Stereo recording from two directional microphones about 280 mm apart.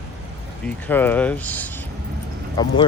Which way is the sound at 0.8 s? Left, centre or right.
Centre.